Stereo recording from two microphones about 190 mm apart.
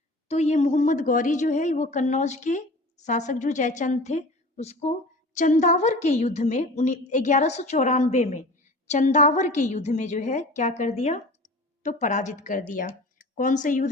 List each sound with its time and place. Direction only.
0.3 s a woman's voice: 35° left (ahead or behind)